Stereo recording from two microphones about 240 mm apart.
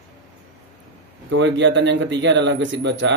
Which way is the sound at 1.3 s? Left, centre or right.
Right.